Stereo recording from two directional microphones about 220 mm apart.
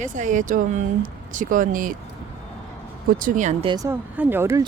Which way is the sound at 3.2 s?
35° right (ahead or behind).